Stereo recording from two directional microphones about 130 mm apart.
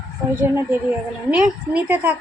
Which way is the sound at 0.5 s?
10° right (ahead or behind).